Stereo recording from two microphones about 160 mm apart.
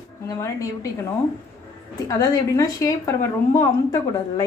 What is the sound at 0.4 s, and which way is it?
Speech, 20° left (ahead or behind).